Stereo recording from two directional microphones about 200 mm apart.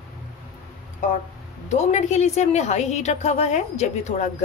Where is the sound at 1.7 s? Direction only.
35° left (ahead or behind).